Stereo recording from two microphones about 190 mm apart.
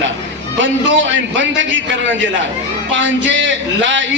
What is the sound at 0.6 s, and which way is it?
A man's voice, 80° right.